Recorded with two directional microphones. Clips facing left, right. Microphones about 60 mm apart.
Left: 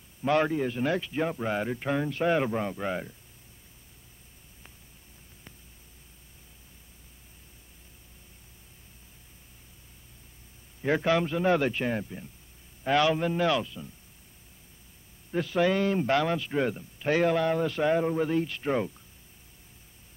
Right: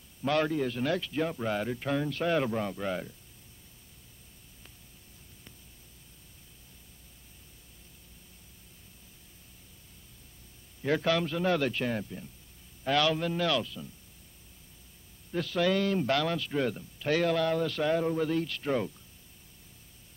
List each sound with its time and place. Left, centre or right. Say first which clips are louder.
0.2 s speech: left 3 dB; left
10.8 s speech: left 3 dB; left
15.3 s speech: left 2 dB; left